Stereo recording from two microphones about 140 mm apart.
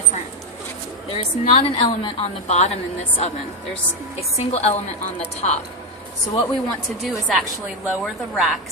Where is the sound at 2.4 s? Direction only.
50° left (ahead or behind).